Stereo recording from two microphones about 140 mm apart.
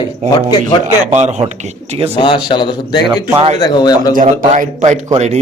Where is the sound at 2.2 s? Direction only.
35° left (ahead or behind).